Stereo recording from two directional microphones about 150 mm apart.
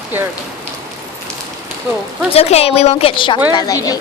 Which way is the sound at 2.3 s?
40° left (ahead or behind).